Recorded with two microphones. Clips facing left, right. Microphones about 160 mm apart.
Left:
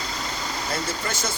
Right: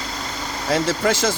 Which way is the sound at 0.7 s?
90° right.